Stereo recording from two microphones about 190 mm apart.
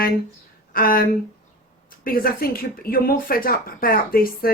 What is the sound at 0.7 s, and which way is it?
Speech, 50° left (ahead or behind).